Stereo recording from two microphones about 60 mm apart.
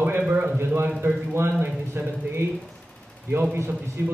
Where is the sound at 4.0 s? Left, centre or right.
Right.